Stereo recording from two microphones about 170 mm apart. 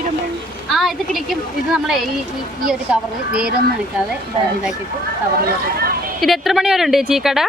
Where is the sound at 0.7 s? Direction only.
Centre (ahead or behind).